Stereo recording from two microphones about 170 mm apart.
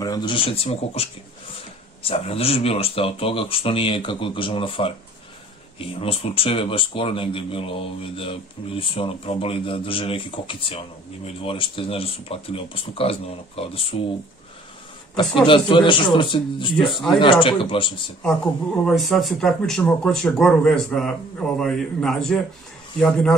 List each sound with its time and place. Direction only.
0.0 s speech: 25° left (ahead or behind)
5.9 s speech: 35° left (ahead or behind)
13.9 s speech: 45° left (ahead or behind)
15.1 s speech: 30° left (ahead or behind)
16.7 s speech: centre (ahead or behind)
17.2 s speech: 30° left (ahead or behind)
18.9 s speech: centre (ahead or behind)